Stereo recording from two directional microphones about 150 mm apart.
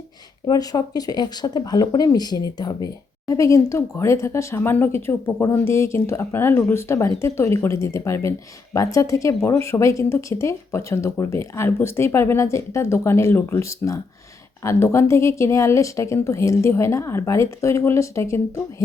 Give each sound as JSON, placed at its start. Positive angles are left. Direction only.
{"t": 0.4, "sound": "speech", "side_deg": 25}